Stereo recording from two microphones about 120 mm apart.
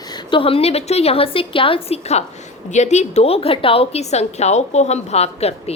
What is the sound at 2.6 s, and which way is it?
A woman's voice, 75° left (ahead or behind).